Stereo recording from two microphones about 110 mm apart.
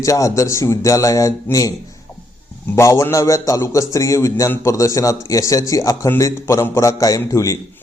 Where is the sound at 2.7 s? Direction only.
25° left (ahead or behind).